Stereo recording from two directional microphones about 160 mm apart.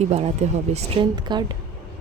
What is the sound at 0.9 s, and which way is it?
Speech, 30° right (ahead or behind).